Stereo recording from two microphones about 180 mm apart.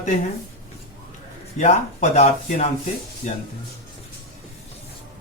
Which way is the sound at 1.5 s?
40° left (ahead or behind).